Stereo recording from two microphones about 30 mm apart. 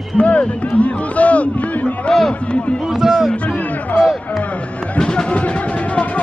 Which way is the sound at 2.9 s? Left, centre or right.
Centre.